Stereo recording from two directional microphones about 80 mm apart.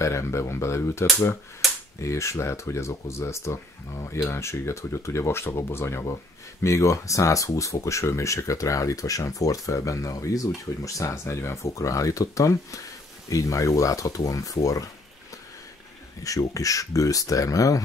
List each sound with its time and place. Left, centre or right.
0.0 s speech: left
2.0 s speech: left
16.3 s speech: left